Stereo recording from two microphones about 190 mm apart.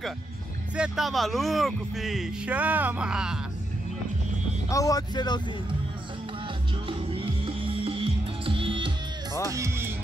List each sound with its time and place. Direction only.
0.7 s speech: 5° right (ahead or behind)
4.6 s speech: 15° left (ahead or behind)
6.9 s music: 30° right (ahead or behind)
9.5 s music: 15° right (ahead or behind)